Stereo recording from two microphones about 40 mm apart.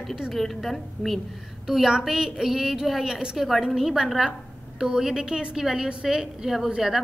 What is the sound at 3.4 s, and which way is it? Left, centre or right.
A woman's voice, centre.